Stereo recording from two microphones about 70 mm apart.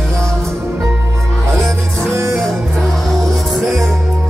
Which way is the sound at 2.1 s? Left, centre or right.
Right.